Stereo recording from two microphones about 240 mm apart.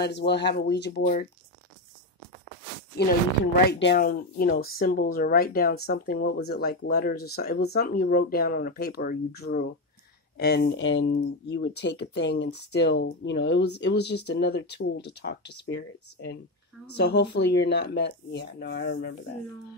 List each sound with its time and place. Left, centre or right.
0.0 s speech: left
3.5 s speech: left